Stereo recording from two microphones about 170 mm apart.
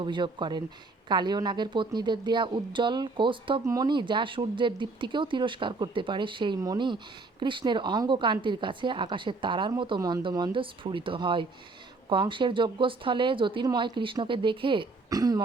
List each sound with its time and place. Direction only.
0.0 s speech: 30° right (ahead or behind)